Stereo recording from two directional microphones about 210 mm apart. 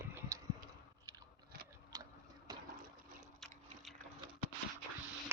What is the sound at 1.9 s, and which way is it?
Tick-tock, 20° right (ahead or behind).